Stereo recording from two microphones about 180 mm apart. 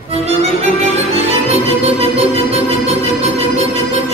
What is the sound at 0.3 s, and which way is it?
Music, 35° right (ahead or behind).